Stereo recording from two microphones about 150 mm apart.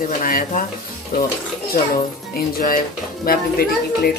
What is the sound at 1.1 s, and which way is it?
Speech, 75° left (ahead or behind).